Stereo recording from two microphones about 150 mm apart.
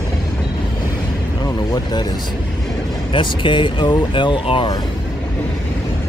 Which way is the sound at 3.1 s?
35° left (ahead or behind).